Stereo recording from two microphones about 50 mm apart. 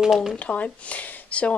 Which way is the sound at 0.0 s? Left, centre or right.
Centre.